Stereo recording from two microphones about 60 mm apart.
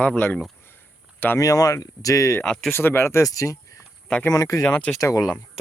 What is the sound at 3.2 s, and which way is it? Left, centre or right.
Speech, left.